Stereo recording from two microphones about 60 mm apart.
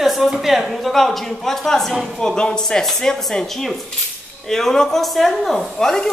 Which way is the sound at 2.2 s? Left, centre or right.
Centre.